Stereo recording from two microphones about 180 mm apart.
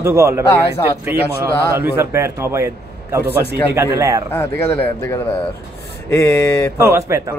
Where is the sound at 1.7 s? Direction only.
10° right (ahead or behind).